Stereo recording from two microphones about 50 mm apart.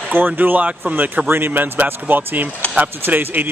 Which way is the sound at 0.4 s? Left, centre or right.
Right.